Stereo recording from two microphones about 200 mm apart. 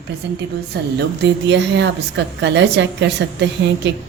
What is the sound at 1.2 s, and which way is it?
A woman's voice, 60° right (ahead or behind).